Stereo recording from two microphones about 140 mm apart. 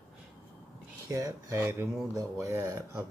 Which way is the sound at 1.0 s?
25° right (ahead or behind).